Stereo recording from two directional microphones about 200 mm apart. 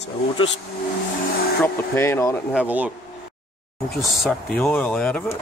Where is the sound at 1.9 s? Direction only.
10° left (ahead or behind).